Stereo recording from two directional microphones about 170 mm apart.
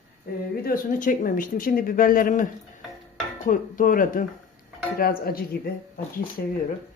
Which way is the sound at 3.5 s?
55° left (ahead or behind).